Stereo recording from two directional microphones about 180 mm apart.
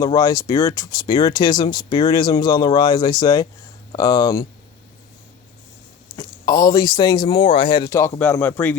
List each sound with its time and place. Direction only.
0.0 s speech: 20° left (ahead or behind)
6.1 s speech: 20° left (ahead or behind)